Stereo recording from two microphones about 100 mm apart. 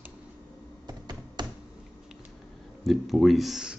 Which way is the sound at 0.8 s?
45° right (ahead or behind).